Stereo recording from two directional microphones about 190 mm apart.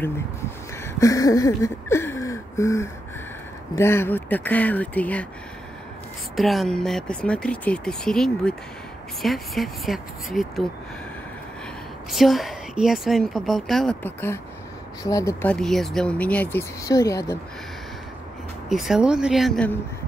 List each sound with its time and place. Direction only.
0.8 s a sound: 15° left (ahead or behind)
3.7 s speech: 15° left (ahead or behind)
6.3 s a woman's voice: centre (ahead or behind)
12.1 s a woman's voice: centre (ahead or behind); by 15.5 s 15° left (ahead or behind)
15.5 s speech: centre (ahead or behind)
18.7 s a woman's voice: centre (ahead or behind)